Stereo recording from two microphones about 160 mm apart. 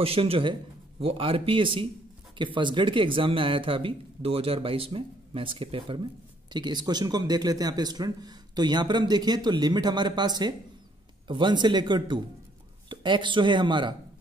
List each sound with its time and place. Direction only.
0.0 s a man's voice: 35° right (ahead or behind)